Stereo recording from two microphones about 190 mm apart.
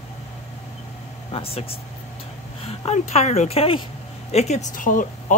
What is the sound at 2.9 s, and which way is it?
Speech, 35° left (ahead or behind).